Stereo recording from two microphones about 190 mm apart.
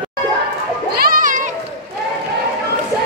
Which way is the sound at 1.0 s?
45° right (ahead or behind).